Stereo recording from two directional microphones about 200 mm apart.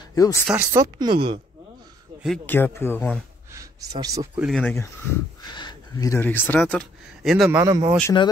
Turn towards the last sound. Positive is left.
turn(degrees=-15)  # may be behind; listen again after turning